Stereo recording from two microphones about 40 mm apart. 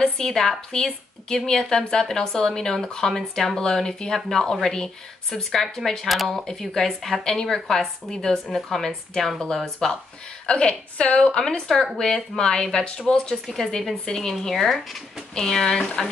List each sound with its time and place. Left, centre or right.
0.0 s a woman's voice: centre
10.4 s a woman's voice: left
11.4 s a woman's voice: centre
13.5 s a woman's voice: centre
14.1 s a woman's voice: centre
14.5 s speech: centre
15.3 s a woman's voice: centre